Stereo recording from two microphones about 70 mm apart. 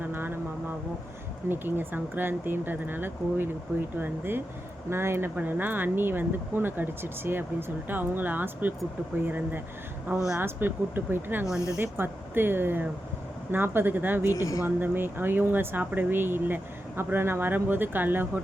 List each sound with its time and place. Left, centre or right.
0.0 s vehicle: right
1.5 s speech: right
14.3 s speech: left
14.6 s speech: right